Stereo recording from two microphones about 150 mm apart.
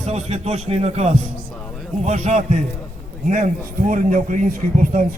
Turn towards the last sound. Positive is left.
turn(degrees=-60)  # may be behind; listen again after turning